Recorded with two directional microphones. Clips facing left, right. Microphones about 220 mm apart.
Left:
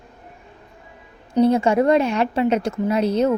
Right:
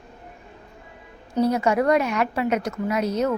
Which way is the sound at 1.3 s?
25° left (ahead or behind).